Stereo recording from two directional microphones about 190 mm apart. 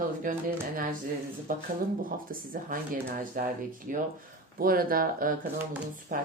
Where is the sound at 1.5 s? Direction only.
45° right (ahead or behind).